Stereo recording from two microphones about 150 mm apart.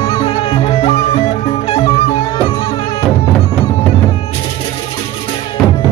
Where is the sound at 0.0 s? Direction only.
40° left (ahead or behind).